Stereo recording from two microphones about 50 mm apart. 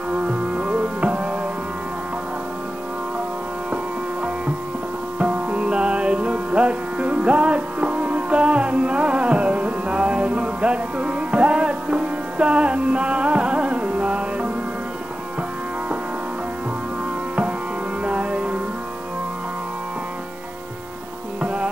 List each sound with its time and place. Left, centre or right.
0.1 s music: right
3.7 s music: right
18.0 s music: right
21.4 s music: right